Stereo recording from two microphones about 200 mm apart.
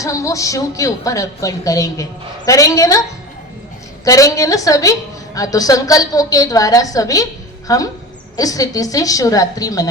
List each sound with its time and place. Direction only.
0.0 s a woman's voice: 15° left (ahead or behind)
4.0 s a woman's voice: 15° left (ahead or behind)